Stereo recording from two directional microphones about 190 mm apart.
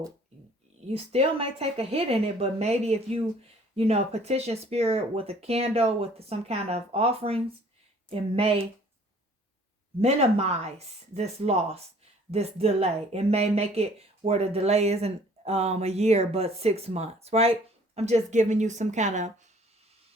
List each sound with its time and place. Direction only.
0.9 s speech: 30° right (ahead or behind)
10.0 s speech: 35° right (ahead or behind)